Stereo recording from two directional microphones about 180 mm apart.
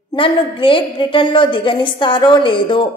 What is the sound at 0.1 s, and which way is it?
A woman's voice, 30° left (ahead or behind).